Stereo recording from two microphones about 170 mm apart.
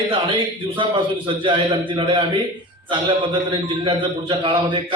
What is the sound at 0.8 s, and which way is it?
A man's voice, 30° right (ahead or behind).